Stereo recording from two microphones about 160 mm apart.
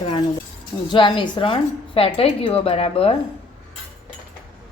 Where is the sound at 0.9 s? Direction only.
30° left (ahead or behind).